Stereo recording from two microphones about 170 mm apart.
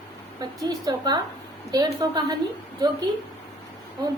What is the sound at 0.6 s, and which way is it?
A woman's voice, 20° right (ahead or behind).